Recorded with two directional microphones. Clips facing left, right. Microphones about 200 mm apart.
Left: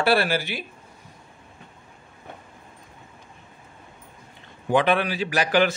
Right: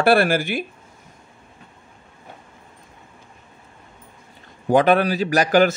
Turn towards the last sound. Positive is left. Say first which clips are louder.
# right 5 dB
turn(degrees=-45)  # may be behind; listen again after turning